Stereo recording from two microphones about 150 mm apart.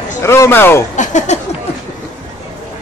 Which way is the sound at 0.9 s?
55° left (ahead or behind).